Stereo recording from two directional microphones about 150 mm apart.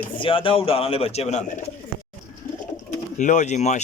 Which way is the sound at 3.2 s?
55° left (ahead or behind).